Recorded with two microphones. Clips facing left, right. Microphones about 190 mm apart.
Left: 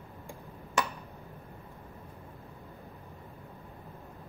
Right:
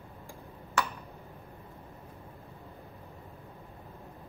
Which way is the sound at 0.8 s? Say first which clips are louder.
Even; 20° left (ahead or behind).